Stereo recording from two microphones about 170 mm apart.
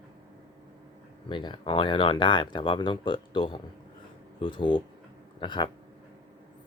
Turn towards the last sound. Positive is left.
turn(degrees=25)  # may be behind; listen again after turning